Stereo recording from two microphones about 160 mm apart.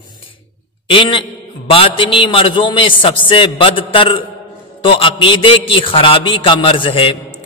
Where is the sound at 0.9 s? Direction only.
35° left (ahead or behind).